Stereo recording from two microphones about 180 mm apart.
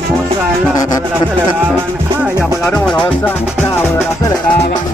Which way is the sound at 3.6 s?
10° left (ahead or behind).